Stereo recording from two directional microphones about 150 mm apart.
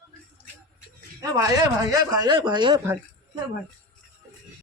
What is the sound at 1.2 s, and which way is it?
Speech, 25° right (ahead or behind).